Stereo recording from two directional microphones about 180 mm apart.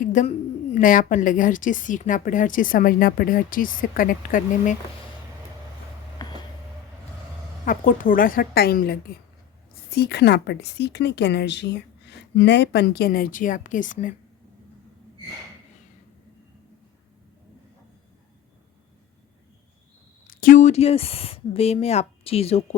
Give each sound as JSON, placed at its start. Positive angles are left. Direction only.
{"t": 0.0, "sound": "a woman's voice", "side_deg": 45}
{"t": 6.2, "sound": "vehicle", "side_deg": 25}
{"t": 7.6, "sound": "a woman's voice", "side_deg": 50}
{"t": 20.4, "sound": "speech", "side_deg": 45}